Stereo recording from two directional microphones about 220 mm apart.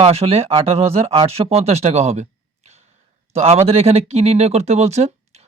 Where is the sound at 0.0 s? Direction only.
25° right (ahead or behind).